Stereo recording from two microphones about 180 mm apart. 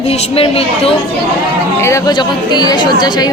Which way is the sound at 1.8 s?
15° left (ahead or behind).